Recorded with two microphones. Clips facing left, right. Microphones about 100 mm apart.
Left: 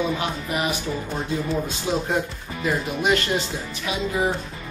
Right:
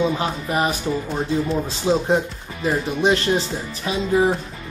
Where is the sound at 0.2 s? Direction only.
35° right (ahead or behind).